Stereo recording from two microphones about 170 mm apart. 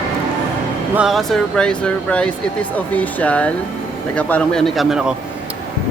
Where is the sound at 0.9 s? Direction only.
Centre (ahead or behind).